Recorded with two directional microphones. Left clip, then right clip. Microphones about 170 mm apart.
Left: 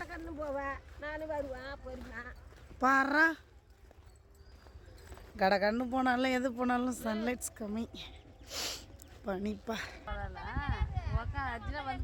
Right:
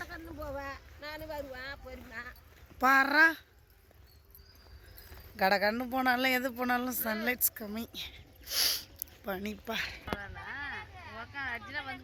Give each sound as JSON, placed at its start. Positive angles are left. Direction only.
{"t": 0.3, "sound": "speech", "side_deg": -30}
{"t": 2.7, "sound": "speech", "side_deg": -15}
{"t": 5.4, "sound": "speech", "side_deg": -5}
{"t": 10.2, "sound": "a sound", "side_deg": 25}
{"t": 11.3, "sound": "speech", "side_deg": 35}